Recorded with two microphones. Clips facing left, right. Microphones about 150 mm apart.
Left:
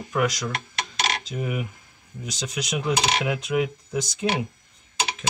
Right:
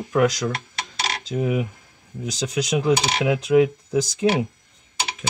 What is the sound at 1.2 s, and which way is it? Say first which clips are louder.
Speech: right 6 dB; 25° right (ahead or behind).